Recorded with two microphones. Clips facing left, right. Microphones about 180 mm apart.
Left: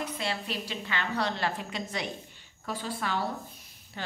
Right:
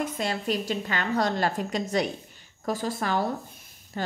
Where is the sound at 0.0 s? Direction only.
45° right (ahead or behind).